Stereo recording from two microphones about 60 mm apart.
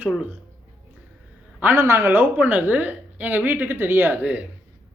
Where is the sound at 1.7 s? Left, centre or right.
Right.